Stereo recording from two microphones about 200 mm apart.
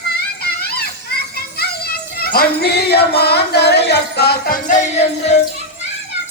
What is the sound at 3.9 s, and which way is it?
Music, 55° left (ahead or behind).